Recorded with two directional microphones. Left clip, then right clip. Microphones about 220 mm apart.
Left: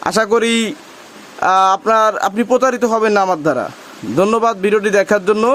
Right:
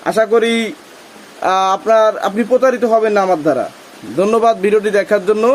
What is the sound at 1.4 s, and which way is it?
A man's voice, 35° left (ahead or behind).